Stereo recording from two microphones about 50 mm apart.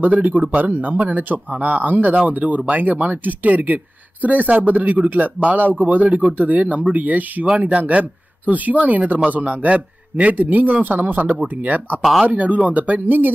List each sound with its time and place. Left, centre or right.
0.0 s speech: right
12.0 s speech: centre
12.3 s speech: right